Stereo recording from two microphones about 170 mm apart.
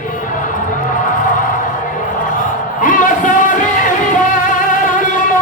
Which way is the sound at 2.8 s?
50° left (ahead or behind).